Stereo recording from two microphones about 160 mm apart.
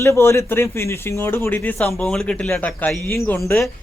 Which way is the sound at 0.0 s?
15° left (ahead or behind).